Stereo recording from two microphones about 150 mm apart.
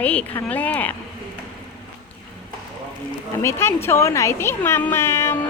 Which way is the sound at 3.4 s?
15° left (ahead or behind).